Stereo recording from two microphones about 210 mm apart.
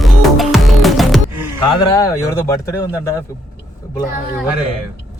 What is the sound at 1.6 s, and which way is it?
Speech, 20° left (ahead or behind).